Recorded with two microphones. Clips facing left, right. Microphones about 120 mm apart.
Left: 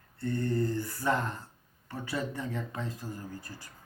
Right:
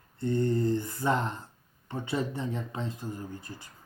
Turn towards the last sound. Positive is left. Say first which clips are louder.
# right 2 dB
turn(degrees=-20)  # may be behind; listen again after turning